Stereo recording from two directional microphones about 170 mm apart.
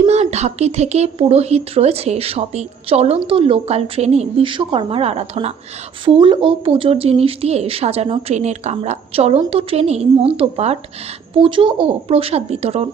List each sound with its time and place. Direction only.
0.0 s speech: 40° right (ahead or behind)